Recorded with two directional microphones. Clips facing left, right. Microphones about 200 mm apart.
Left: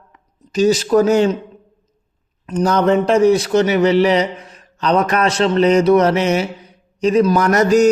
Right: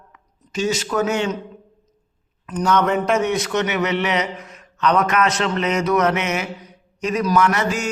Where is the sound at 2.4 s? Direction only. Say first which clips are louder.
Left 4 dB; 30° left (ahead or behind).